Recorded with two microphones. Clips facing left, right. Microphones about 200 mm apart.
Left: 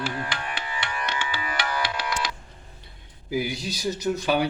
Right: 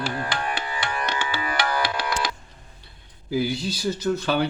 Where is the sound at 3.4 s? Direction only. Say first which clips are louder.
Right 4 dB; 15° left (ahead or behind).